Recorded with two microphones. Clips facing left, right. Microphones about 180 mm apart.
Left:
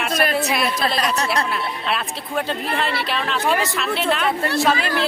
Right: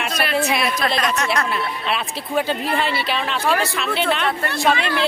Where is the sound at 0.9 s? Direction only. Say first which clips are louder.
Even; 35° left (ahead or behind).